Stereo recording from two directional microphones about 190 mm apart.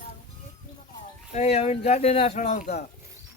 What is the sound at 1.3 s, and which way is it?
Speech, 35° left (ahead or behind).